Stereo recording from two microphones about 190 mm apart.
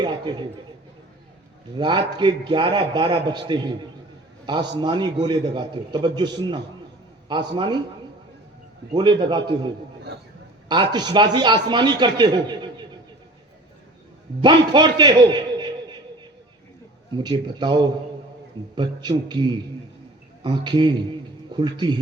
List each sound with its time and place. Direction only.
0.0 s a sound: 25° right (ahead or behind)
1.7 s a man's voice: 25° right (ahead or behind)
8.9 s a man's voice: 25° right (ahead or behind)
14.4 s a man's voice: 25° right (ahead or behind)
17.2 s a man's voice: 25° right (ahead or behind)